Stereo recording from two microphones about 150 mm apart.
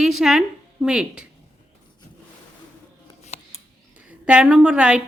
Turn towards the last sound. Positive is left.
turn(degrees=-5)  # may be behind; listen again after turning